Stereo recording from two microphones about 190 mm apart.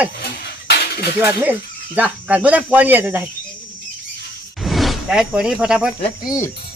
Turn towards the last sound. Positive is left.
turn(degrees=20)  # may be behind; listen again after turning